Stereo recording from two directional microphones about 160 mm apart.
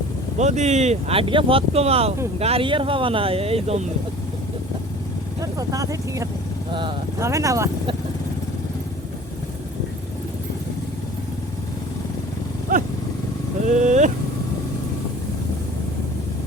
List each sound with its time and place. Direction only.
0.3 s speech: 45° right (ahead or behind)
5.4 s speech: 20° right (ahead or behind)
12.7 s vehicle: 55° right (ahead or behind)
13.7 s speech: 50° right (ahead or behind)